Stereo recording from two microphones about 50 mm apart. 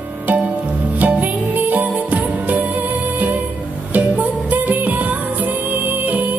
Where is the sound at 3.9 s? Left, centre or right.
Right.